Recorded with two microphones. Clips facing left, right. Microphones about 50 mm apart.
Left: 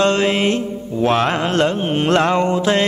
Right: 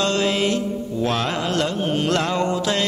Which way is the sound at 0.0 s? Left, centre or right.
Left.